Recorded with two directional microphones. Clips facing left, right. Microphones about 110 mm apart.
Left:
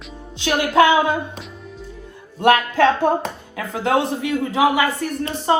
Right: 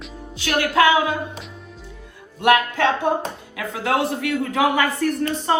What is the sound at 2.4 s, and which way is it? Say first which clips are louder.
Music: left 2 dB; 35° left (ahead or behind).